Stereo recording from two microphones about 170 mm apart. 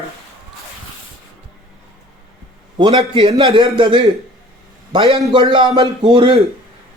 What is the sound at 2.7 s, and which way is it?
A man's voice, 30° right (ahead or behind).